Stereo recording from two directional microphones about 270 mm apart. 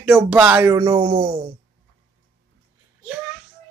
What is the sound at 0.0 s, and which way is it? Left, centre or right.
Speech, centre.